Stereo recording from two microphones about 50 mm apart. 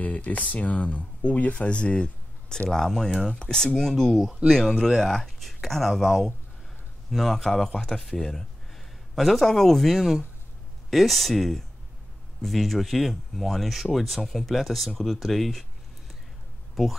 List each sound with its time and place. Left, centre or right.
0.0 s speech: left
2.7 s speech: centre
16.8 s speech: centre